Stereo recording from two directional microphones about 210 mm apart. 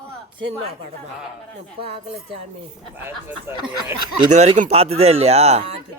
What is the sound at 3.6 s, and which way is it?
Speech, 20° right (ahead or behind).